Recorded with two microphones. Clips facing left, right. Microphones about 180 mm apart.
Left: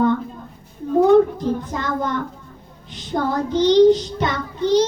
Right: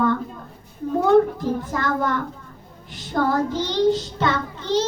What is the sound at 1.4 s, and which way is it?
Child singing, 20° left (ahead or behind).